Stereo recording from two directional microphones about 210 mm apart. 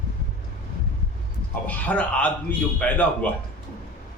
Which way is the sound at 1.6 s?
5° left (ahead or behind).